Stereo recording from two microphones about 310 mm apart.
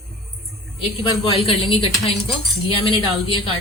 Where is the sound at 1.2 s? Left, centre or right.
Centre.